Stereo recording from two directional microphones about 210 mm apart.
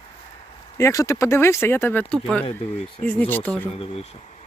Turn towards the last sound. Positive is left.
turn(degrees=30)  # may be behind; listen again after turning